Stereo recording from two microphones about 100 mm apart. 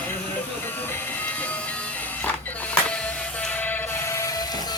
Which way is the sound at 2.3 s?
15° left (ahead or behind).